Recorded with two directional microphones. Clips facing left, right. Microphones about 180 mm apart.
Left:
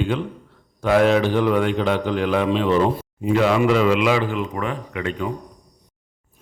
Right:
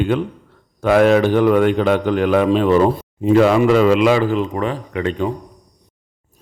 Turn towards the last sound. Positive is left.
turn(degrees=-30)  # may be behind; listen again after turning